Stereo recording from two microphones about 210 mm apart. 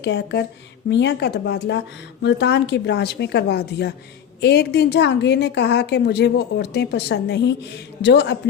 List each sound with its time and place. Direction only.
0.0 s a woman's voice: 55° left (ahead or behind)